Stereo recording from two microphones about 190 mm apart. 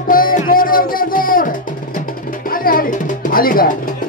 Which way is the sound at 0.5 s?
50° left (ahead or behind).